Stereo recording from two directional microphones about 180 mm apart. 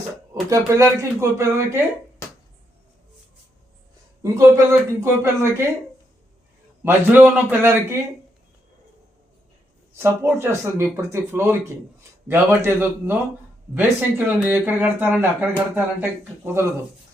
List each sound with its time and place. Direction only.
0.5 s speech: 15° right (ahead or behind)
4.2 s speech: 15° right (ahead or behind)
6.8 s speech: 10° right (ahead or behind)
9.9 s speech: 15° right (ahead or behind)